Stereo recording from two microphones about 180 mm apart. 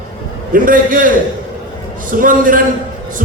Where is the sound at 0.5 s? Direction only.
50° right (ahead or behind).